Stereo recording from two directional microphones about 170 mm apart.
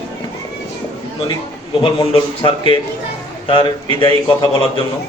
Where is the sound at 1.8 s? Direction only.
30° left (ahead or behind).